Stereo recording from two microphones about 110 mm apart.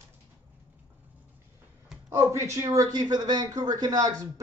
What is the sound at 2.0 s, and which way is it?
Speech, 30° right (ahead or behind).